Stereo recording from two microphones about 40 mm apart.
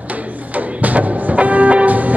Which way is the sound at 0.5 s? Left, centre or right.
Right.